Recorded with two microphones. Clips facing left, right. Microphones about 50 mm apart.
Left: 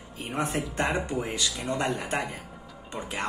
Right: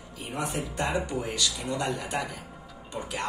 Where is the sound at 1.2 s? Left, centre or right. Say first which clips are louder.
Even; left.